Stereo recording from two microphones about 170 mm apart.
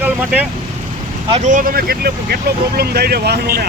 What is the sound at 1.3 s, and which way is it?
Speech, 45° right (ahead or behind).